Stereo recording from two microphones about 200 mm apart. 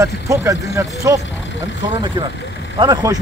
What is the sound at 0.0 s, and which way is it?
Speech, 15° right (ahead or behind).